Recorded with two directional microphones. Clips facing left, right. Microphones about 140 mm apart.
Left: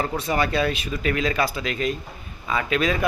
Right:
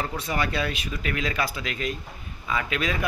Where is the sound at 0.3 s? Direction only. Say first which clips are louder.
Left 5 dB; 35° left (ahead or behind).